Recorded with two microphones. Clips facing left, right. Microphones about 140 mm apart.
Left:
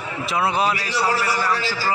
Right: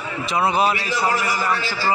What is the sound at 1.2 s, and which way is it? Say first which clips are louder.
Speech: left 1 dB; 70° left (ahead or behind).